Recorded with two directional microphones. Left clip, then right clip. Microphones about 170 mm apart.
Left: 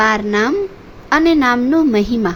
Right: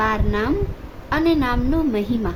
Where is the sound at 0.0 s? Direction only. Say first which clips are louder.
Left 7 dB; 25° left (ahead or behind).